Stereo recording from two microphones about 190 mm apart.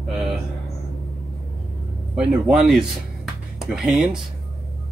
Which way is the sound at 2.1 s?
5° right (ahead or behind).